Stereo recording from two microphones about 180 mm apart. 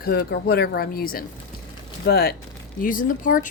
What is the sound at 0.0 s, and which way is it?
Speech, 60° left (ahead or behind).